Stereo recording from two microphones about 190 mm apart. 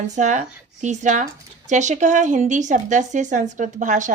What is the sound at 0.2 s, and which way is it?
Speech, 40° right (ahead or behind).